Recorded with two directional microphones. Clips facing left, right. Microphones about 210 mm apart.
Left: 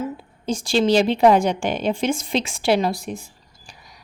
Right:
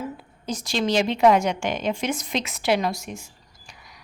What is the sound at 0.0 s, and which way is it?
A woman's voice, 30° left (ahead or behind).